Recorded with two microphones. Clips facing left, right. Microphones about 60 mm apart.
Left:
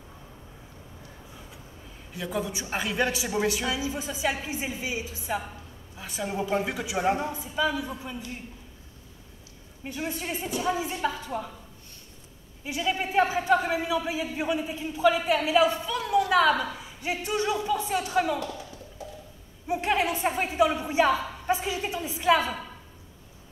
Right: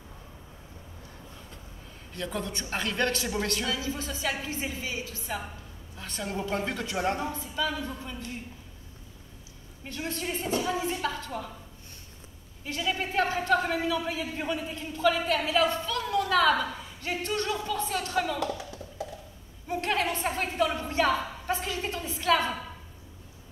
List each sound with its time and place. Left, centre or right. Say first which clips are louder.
2.1 s a man's voice: left 3 dB; centre
9.8 s a man's voice: left 1 dB; centre
12.6 s a man's voice: left 2 dB; centre
19.0 s a sound: right 4 dB; right
19.7 s a sound: left 3 dB; centre
21.5 s a man's voice: left 4 dB; centre